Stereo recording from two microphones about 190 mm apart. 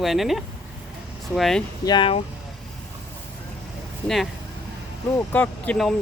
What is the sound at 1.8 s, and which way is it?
Speech, 25° left (ahead or behind).